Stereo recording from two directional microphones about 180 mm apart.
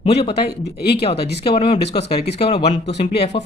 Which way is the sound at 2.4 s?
35° left (ahead or behind).